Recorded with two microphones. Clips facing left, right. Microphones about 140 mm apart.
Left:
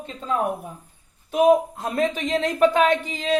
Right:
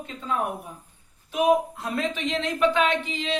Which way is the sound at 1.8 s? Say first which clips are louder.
Left 4 dB; 40° left (ahead or behind).